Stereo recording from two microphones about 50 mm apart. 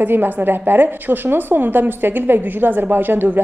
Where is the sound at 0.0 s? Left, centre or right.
Right.